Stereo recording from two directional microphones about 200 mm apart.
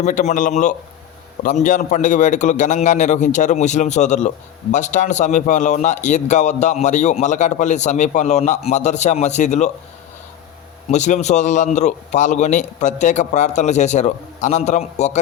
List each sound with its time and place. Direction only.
0.0 s a man's voice: 35° left (ahead or behind)
10.9 s a man's voice: 35° left (ahead or behind)